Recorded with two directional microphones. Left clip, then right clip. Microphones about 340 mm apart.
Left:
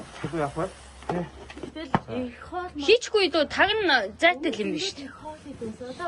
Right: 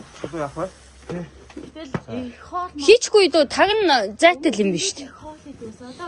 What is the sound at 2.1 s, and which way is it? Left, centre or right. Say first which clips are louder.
A woman's voice: right 4 dB; centre.